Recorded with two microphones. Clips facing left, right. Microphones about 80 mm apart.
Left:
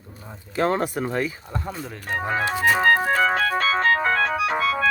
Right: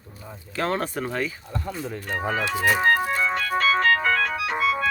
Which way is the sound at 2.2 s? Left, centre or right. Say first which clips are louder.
Left 2 dB; left.